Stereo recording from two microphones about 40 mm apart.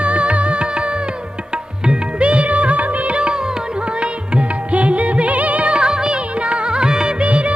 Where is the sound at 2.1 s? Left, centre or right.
Right.